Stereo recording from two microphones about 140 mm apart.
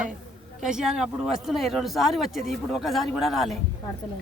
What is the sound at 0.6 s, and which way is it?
A man's voice, 5° right (ahead or behind).